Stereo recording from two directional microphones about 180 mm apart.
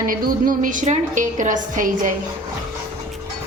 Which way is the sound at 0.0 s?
50° right (ahead or behind).